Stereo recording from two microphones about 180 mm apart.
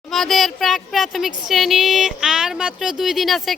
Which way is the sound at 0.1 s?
Centre (ahead or behind).